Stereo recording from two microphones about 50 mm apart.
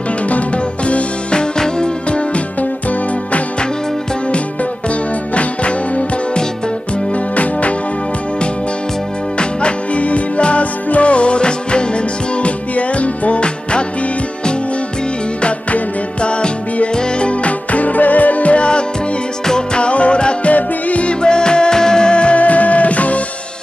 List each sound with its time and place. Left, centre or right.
0.8 s music: left
5.3 s music: left
9.4 s music: left
15.4 s music: left